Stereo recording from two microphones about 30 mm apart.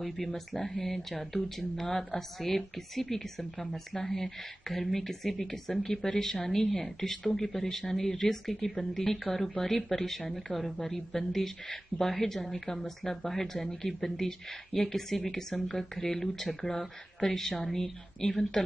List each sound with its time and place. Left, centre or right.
0.5 s speech: centre